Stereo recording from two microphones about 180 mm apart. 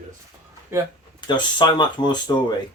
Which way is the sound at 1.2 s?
25° left (ahead or behind).